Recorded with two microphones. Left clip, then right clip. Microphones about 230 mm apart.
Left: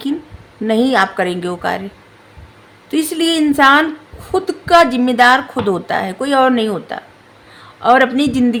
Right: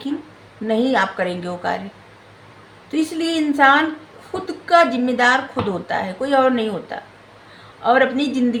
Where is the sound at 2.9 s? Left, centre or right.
Left.